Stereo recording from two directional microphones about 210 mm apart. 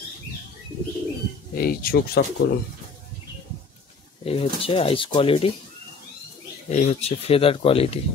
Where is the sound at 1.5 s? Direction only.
45° left (ahead or behind).